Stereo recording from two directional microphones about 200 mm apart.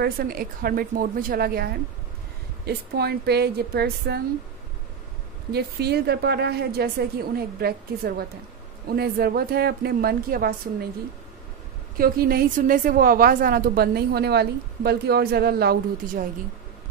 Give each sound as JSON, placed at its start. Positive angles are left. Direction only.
{"t": 0.0, "sound": "a woman's voice", "side_deg": -50}
{"t": 5.5, "sound": "a woman's voice", "side_deg": -55}
{"t": 12.0, "sound": "a woman's voice", "side_deg": -50}